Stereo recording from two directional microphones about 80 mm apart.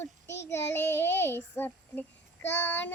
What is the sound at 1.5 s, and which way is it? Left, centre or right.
Child singing, left.